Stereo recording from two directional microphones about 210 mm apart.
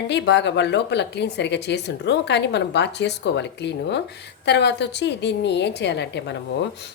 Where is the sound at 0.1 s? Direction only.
55° left (ahead or behind).